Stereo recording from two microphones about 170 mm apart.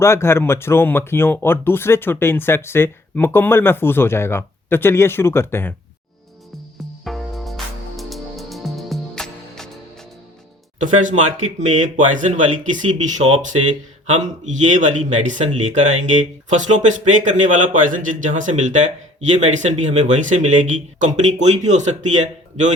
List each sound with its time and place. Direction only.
0.0 s speech: 15° left (ahead or behind)
7.0 s music: centre (ahead or behind)
11.0 s speech: 45° right (ahead or behind)